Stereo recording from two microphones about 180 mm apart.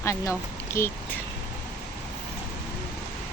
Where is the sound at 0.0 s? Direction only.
15° left (ahead or behind).